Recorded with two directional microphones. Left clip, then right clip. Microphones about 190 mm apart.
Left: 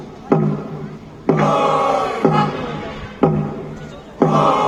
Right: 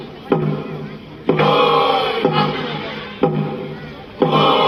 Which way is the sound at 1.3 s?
40° left (ahead or behind).